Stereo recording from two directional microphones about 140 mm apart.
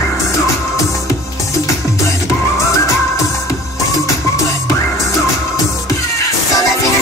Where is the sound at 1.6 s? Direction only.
20° left (ahead or behind).